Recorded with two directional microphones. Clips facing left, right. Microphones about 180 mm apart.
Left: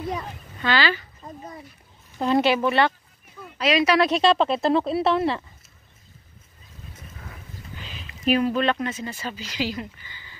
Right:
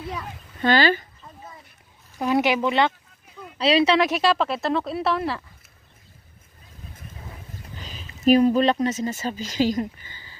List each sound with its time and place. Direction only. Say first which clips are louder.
0.6 s speech: right 4 dB; 45° right (ahead or behind)
1.2 s speech: left 5 dB; 40° left (ahead or behind)
2.1 s speech: left 1 dB; 10° right (ahead or behind)
3.5 s speech: right 2 dB; 30° right (ahead or behind)
4.0 s speech: left 2 dB; 10° right (ahead or behind)
4.4 s speech: left 3 dB; 30° left (ahead or behind)
7.7 s a sound: left 1 dB; 40° right (ahead or behind)
8.5 s speech: right 4 dB; 35° right (ahead or behind)